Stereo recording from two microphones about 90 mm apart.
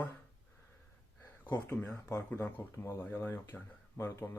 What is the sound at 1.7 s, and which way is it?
Speech, 20° left (ahead or behind).